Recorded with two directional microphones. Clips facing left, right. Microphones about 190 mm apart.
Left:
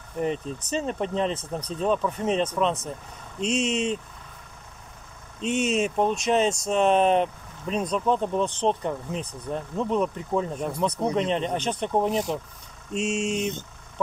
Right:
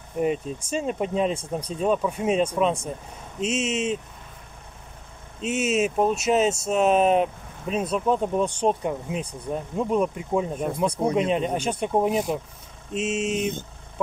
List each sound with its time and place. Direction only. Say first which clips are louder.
0.2 s speech: right 3 dB; 10° right (ahead or behind)
5.4 s speech: right 1 dB; 5° right (ahead or behind)